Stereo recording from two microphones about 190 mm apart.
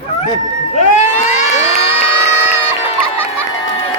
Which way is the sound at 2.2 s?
35° left (ahead or behind).